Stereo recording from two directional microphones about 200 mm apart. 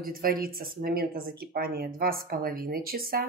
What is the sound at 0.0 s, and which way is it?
A woman's voice, 45° right (ahead or behind).